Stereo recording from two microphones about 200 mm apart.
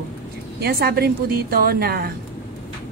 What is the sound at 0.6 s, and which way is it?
A woman's voice, 50° right (ahead or behind).